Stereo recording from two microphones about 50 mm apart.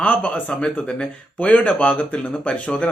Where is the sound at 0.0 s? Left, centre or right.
Left.